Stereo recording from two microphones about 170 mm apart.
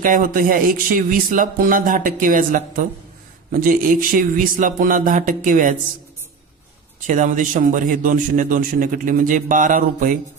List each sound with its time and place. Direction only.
0.0 s a man's voice: 55° right (ahead or behind)
7.1 s a man's voice: 50° right (ahead or behind)